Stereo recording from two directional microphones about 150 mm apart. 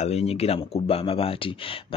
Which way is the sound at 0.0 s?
45° left (ahead or behind).